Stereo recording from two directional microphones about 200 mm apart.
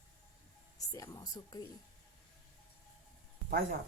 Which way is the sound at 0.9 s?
15° left (ahead or behind).